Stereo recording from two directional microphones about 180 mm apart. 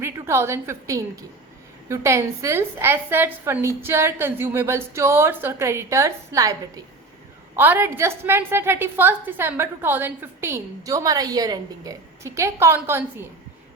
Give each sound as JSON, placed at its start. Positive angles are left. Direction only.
{"t": 0.0, "sound": "a woman's voice", "side_deg": -15}